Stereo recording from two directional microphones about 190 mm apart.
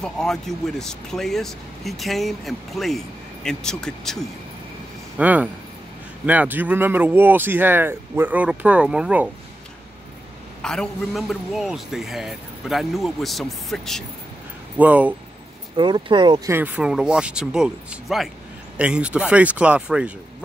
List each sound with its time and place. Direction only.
0.0 s a man's voice: centre (ahead or behind)
5.1 s speech: 10° right (ahead or behind)
10.6 s a man's voice: 5° left (ahead or behind)
15.7 s speech: 25° right (ahead or behind)
16.4 s a man's voice: 10° right (ahead or behind)